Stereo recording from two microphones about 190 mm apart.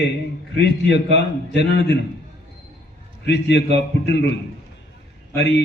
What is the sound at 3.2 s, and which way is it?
Speech, 65° left (ahead or behind).